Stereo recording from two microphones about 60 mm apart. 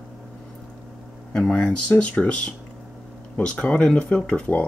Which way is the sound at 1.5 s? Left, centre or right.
Centre.